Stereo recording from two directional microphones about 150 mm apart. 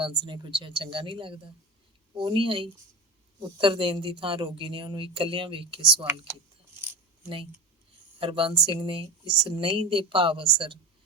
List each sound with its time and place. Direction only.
0.0 s speech: 35° right (ahead or behind)
8.2 s speech: 35° right (ahead or behind)